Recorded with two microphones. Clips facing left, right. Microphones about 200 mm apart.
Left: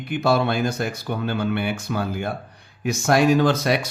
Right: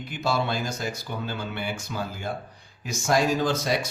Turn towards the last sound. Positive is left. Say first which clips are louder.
# left 6 dB
turn(degrees=65)  # may be behind; listen again after turning